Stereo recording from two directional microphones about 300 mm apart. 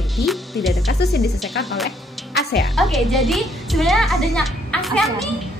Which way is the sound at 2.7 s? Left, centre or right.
Centre.